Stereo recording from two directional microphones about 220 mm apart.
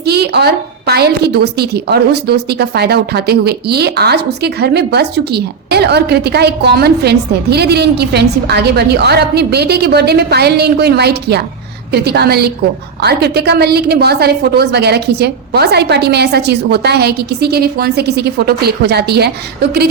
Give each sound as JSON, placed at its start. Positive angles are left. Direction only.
{"t": 0.0, "sound": "a woman's voice", "side_deg": -50}